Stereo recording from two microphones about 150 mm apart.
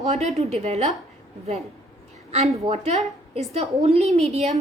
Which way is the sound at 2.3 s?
45° right (ahead or behind).